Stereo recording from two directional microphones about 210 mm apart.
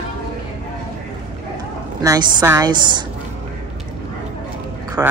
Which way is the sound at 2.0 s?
20° right (ahead or behind).